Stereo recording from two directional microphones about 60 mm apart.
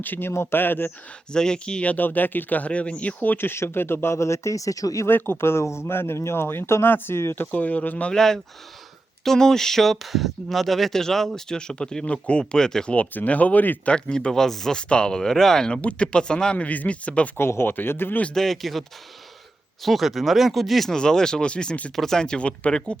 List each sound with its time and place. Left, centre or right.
0.0 s speech: left
1.3 s speech: centre
3.3 s speech: left
5.0 s speech: left
7.3 s speech: left
8.1 s speech: centre; by 13.9 s left
13.9 s speech: centre
16.6 s speech: left
17.3 s speech: left
18.3 s speech: centre
21.9 s speech: centre